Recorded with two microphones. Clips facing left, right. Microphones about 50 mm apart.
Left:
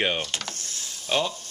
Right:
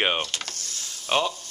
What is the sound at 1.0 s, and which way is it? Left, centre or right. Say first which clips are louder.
Speech: right 2 dB; right.